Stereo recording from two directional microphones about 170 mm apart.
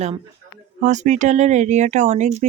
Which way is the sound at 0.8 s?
45° right (ahead or behind).